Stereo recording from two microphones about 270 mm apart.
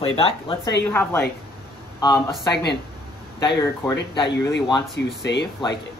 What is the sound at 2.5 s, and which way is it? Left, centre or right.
Speech, left.